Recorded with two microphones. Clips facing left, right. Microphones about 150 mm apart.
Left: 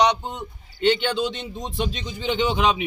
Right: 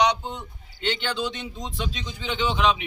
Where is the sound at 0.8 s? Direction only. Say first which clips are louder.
Left 7 dB; 20° left (ahead or behind).